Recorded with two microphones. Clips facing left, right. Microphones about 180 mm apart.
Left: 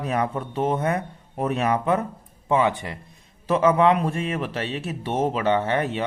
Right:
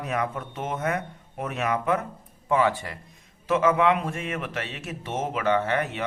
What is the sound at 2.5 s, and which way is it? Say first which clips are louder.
Speech: left 2 dB; 20° left (ahead or behind).